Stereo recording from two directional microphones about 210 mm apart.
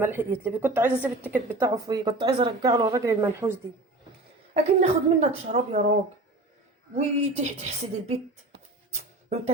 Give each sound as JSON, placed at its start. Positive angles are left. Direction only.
{"t": 0.0, "sound": "a woman's voice", "side_deg": -10}
{"t": 4.5, "sound": "a woman's voice", "side_deg": -30}
{"t": 6.9, "sound": "a woman's voice", "side_deg": -30}
{"t": 8.9, "sound": "music", "side_deg": -30}